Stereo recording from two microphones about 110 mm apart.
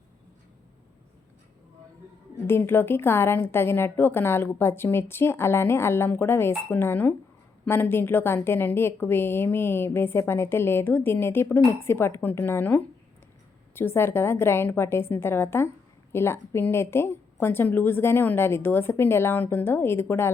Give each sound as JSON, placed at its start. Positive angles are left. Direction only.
{"t": 2.5, "sound": "a woman's voice", "side_deg": 20}